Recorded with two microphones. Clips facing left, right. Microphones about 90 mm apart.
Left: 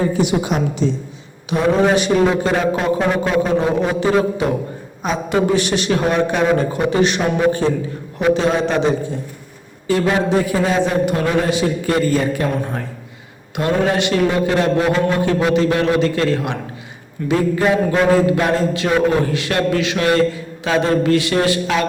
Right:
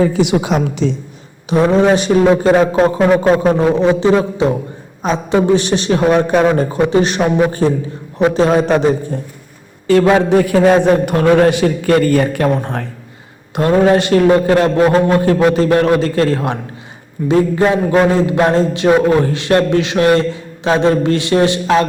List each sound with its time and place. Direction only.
0.1 s a woman's voice: 90° right
1.5 s speech: 35° right (ahead or behind)
9.8 s a man's voice: 70° right (ahead or behind)
13.6 s speech: 35° right (ahead or behind)